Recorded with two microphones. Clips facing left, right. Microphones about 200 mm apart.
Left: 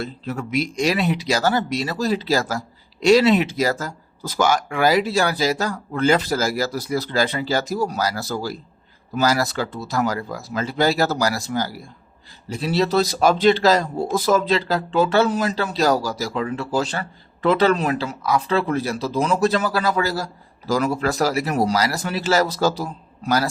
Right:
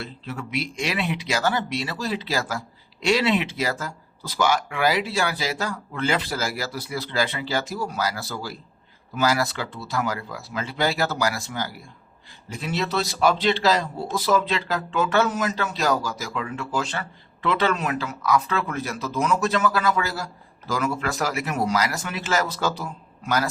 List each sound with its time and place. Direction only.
0.0 s speech: 40° left (ahead or behind)